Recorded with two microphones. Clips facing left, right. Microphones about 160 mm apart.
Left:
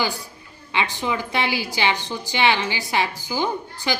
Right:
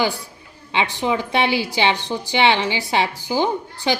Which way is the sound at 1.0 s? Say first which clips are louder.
Right 7 dB; 20° right (ahead or behind).